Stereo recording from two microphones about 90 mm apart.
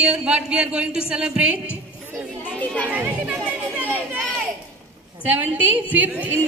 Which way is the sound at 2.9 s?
15° right (ahead or behind).